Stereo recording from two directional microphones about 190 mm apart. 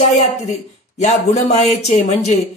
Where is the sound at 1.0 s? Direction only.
35° left (ahead or behind).